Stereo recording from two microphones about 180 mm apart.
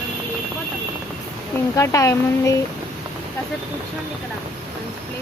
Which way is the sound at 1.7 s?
15° left (ahead or behind).